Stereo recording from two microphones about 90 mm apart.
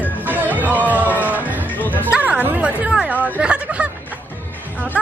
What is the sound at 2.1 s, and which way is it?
Speech, 15° right (ahead or behind).